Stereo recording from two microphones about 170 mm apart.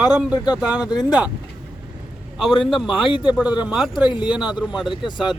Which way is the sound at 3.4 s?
5° right (ahead or behind).